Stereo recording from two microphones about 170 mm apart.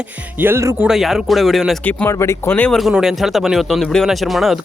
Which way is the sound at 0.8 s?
Centre (ahead or behind).